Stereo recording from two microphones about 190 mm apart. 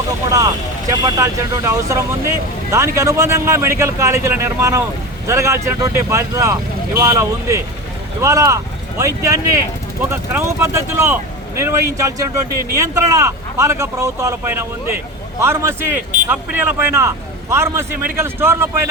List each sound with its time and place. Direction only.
0.3 s speech: 15° right (ahead or behind)